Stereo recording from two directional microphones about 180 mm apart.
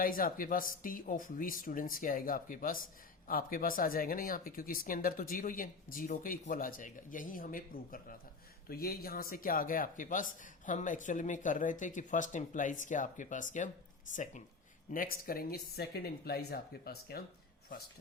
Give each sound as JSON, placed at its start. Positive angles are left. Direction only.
{"t": 0.0, "sound": "speech", "side_deg": 50}
{"t": 14.9, "sound": "speech", "side_deg": 55}